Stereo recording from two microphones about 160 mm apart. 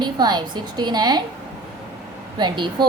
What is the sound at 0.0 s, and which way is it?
A woman's voice, 25° right (ahead or behind).